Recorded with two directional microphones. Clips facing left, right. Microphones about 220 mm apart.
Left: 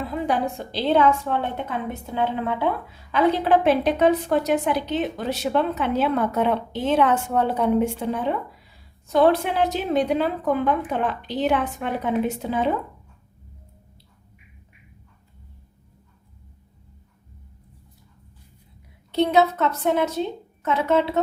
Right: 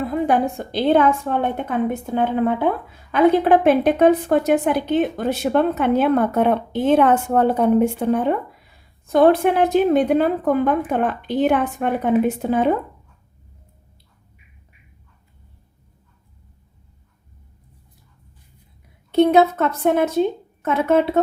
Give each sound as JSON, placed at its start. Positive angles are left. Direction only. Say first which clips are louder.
{"t": 0.0, "sound": "a woman's voice", "louder": "right 5 dB", "side_deg": -50}
{"t": 19.1, "sound": "a woman's voice", "louder": "right 5 dB", "side_deg": -55}